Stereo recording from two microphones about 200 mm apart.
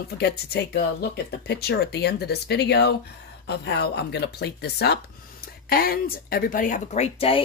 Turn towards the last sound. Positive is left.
turn(degrees=30)  # may be behind; listen again after turning